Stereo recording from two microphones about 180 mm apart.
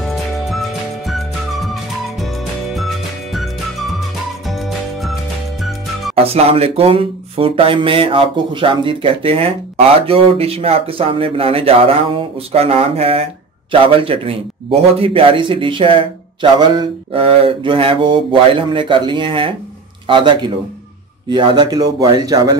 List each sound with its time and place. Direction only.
0.0 s music: centre (ahead or behind)
4.5 s music: centre (ahead or behind)
6.1 s a sound: 35° right (ahead or behind)
20.1 s speech: 25° right (ahead or behind)